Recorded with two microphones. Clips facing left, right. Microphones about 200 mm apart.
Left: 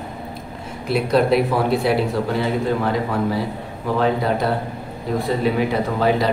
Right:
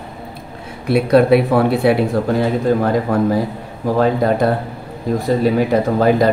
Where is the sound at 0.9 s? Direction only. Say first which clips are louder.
Right 5 dB; 60° right (ahead or behind).